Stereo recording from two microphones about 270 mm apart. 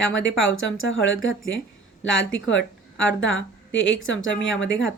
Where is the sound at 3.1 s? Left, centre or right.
Left.